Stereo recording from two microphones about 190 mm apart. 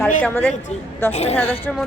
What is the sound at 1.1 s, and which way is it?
Speech, 35° left (ahead or behind).